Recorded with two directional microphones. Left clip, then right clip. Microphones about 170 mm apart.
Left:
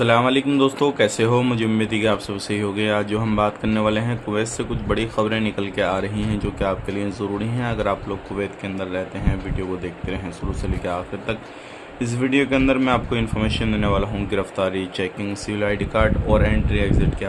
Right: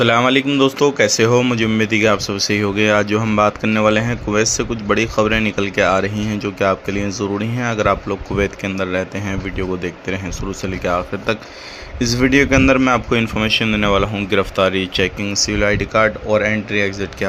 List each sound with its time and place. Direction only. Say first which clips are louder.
0.0 s a man's voice: right 4 dB; 20° right (ahead or behind)